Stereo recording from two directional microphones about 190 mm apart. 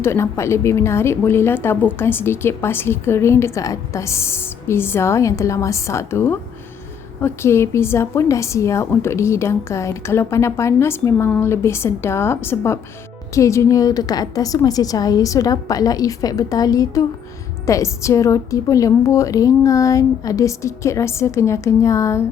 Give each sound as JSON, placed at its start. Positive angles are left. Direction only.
{"t": 0.0, "sound": "a woman's voice", "side_deg": 15}